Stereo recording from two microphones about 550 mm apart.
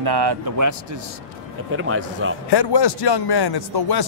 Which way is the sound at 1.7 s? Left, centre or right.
Right.